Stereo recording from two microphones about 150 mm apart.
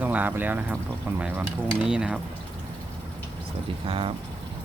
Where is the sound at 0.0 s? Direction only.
10° right (ahead or behind).